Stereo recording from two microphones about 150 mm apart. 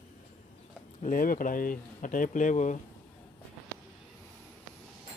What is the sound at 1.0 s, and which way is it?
Speech, 65° left (ahead or behind).